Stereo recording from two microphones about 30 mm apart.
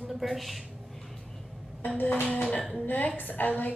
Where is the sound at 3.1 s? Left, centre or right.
Left.